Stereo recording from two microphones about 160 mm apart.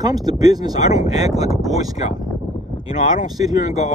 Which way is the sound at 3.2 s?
25° right (ahead or behind).